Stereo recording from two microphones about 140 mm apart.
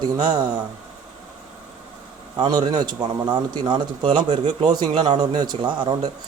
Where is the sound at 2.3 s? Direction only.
30° right (ahead or behind).